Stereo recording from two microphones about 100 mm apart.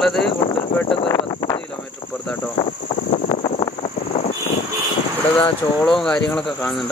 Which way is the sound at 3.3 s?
80° left.